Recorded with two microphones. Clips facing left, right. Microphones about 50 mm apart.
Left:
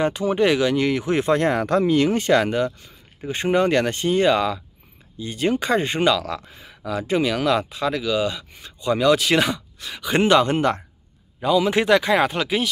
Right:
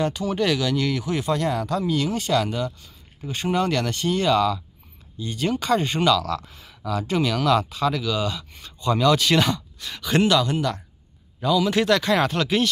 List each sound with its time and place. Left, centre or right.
0.0 s speech: left
10.2 s speech: left
11.4 s speech: left